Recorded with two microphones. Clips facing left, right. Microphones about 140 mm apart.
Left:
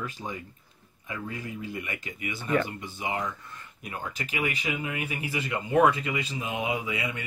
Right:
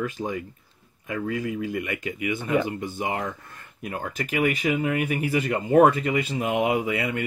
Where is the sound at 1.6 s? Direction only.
50° right (ahead or behind).